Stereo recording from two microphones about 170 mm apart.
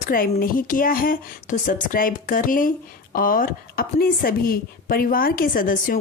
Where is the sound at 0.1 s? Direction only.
60° left (ahead or behind).